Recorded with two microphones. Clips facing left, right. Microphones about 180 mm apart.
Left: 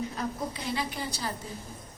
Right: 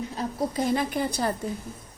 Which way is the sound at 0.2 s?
40° right (ahead or behind).